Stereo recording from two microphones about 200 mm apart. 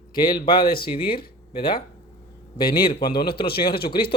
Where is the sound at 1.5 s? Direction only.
25° left (ahead or behind).